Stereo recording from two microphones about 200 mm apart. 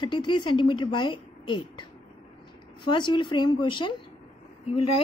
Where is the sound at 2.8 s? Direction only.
25° left (ahead or behind).